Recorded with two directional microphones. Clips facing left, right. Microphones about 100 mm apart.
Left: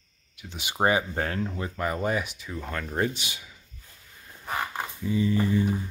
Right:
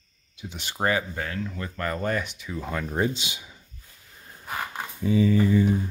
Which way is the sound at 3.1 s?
20° right (ahead or behind).